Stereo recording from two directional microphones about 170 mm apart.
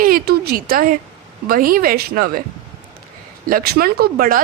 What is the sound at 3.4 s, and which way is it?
Speech, 60° right (ahead or behind).